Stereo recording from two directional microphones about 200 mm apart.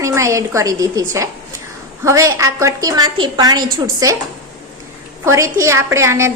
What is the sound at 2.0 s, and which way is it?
Speech, 15° right (ahead or behind).